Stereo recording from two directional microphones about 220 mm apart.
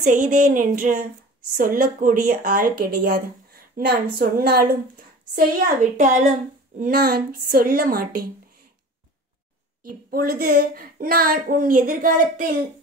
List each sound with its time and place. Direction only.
0.0 s a woman's voice: 35° right (ahead or behind)
10.1 s a woman's voice: 40° right (ahead or behind)